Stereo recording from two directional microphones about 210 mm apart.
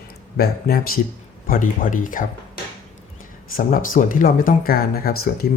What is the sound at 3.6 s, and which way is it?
Speech, 40° left (ahead or behind).